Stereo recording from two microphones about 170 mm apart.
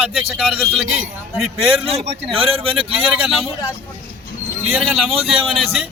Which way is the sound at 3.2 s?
Centre (ahead or behind).